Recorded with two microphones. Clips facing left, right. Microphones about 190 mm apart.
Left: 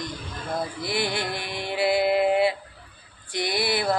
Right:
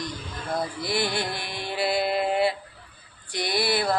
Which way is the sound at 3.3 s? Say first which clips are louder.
Even; 20° left (ahead or behind).